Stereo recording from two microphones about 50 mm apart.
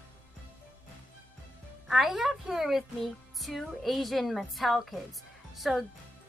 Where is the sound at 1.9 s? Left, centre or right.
Centre.